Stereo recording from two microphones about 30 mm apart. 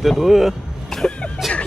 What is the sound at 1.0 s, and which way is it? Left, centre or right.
Speech, left.